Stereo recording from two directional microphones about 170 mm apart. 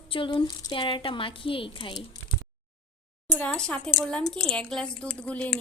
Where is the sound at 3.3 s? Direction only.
5° left (ahead or behind).